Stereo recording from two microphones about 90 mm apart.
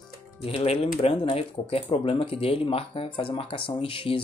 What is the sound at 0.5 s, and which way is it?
Speech, 90° left.